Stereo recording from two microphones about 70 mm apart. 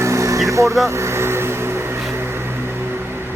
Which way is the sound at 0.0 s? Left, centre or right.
Right.